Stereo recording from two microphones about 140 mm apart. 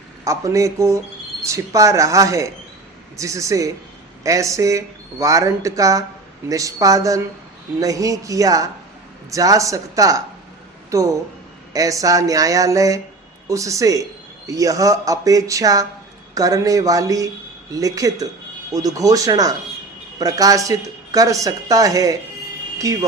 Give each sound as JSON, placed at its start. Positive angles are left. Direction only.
{"t": 0.3, "sound": "speech", "side_deg": -20}